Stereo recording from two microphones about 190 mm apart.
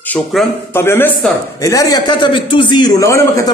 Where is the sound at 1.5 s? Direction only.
20° left (ahead or behind).